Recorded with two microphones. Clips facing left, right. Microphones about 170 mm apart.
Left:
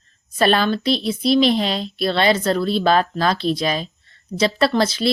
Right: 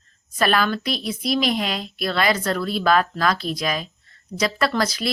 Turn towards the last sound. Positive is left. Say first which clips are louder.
# left 4 dB
turn(degrees=25)  # may be behind; listen again after turning